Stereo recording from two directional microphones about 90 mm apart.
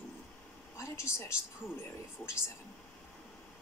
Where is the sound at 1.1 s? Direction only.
30° left (ahead or behind).